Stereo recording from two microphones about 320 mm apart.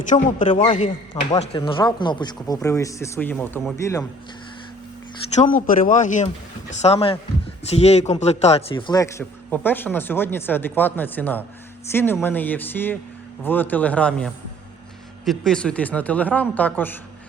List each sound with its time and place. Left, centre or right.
0.1 s a man's voice: left
5.3 s a man's voice: left; by 17.0 s centre